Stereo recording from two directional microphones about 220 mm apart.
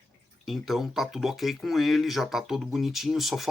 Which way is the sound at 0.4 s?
Centre (ahead or behind).